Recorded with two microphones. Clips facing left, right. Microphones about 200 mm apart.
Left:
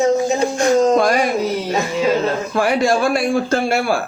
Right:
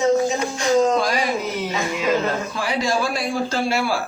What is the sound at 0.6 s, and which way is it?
Speech, 55° left (ahead or behind).